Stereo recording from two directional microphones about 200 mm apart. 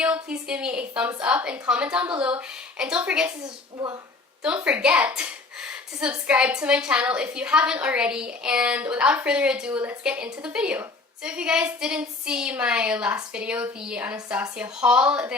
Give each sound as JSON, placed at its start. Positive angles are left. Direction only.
{"t": 0.0, "sound": "a woman's voice", "side_deg": -5}
{"t": 3.4, "sound": "a woman's voice", "side_deg": -20}
{"t": 4.4, "sound": "a woman's voice", "side_deg": -5}